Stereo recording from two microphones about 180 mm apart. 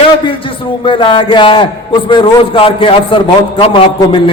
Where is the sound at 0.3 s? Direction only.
30° left (ahead or behind).